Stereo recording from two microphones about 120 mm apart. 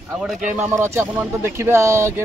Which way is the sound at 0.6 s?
20° right (ahead or behind).